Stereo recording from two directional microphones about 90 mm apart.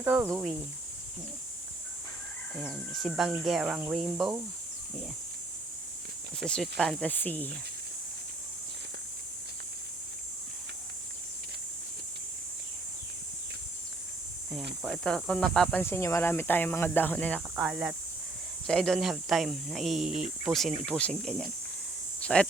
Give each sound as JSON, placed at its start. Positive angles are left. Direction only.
{"t": 0.0, "sound": "speech", "side_deg": -20}
{"t": 2.6, "sound": "speech", "side_deg": 0}
{"t": 6.3, "sound": "speech", "side_deg": 5}
{"t": 7.1, "sound": "speech", "side_deg": 20}
{"t": 14.5, "sound": "speech", "side_deg": -5}
{"t": 15.0, "sound": "speech", "side_deg": 10}
{"t": 15.8, "sound": "speech", "side_deg": 30}
{"t": 17.5, "sound": "speech", "side_deg": -10}
{"t": 18.7, "sound": "speech", "side_deg": 5}